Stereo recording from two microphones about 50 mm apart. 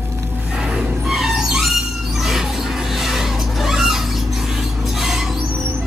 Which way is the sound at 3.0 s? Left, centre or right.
Centre.